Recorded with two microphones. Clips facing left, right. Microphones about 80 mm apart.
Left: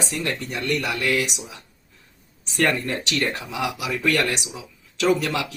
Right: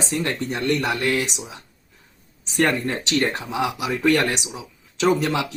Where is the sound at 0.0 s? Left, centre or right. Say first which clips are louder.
Right 3 dB; right.